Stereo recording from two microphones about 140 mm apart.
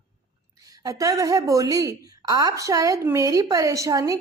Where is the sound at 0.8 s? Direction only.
25° right (ahead or behind).